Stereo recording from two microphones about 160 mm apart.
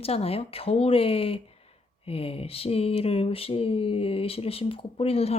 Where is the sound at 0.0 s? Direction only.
40° left (ahead or behind).